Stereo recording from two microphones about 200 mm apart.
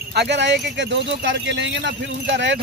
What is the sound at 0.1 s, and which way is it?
Speech, 60° right (ahead or behind).